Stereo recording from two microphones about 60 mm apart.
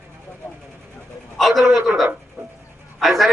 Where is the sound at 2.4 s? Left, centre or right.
Right.